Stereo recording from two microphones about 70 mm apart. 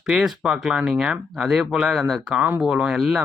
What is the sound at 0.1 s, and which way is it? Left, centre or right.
Speech, centre.